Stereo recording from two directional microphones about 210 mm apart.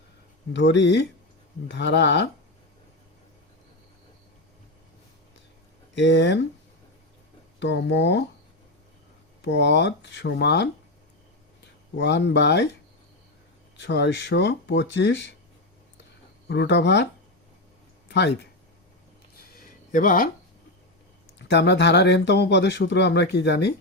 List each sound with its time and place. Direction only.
0.5 s speech: 55° left (ahead or behind)
5.9 s speech: 55° left (ahead or behind)
7.6 s speech: 55° left (ahead or behind)
9.4 s speech: 55° left (ahead or behind)
11.9 s speech: 55° left (ahead or behind)
13.7 s speech: 55° left (ahead or behind)
16.5 s speech: 55° left (ahead or behind)
18.1 s speech: 55° left (ahead or behind)
19.5 s a sound: 40° left (ahead or behind)
21.3 s speech: 55° left (ahead or behind)